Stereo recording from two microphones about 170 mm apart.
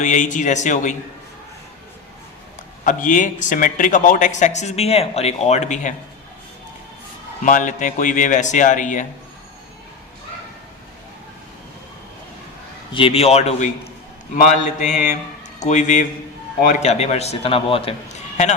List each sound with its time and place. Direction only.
0.0 s speech: 50° left (ahead or behind)
2.8 s speech: 50° left (ahead or behind)
7.4 s speech: 50° left (ahead or behind)
12.9 s a man's voice: 30° left (ahead or behind)